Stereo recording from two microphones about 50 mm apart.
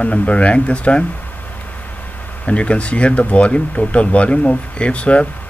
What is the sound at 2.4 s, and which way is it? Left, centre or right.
Speech, left.